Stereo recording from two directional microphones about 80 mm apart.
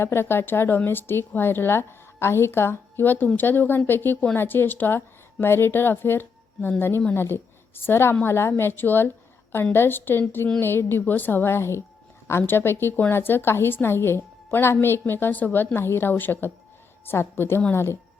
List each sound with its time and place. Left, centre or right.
0.0 s a woman's voice: left